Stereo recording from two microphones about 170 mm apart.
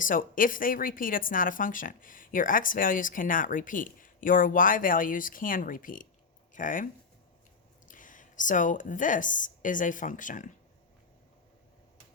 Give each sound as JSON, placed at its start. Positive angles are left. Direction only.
{"t": 0.0, "sound": "speech", "side_deg": 55}
{"t": 7.9, "sound": "speech", "side_deg": 50}